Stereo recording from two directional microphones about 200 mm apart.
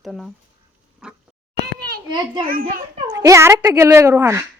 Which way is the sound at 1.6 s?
50° right (ahead or behind).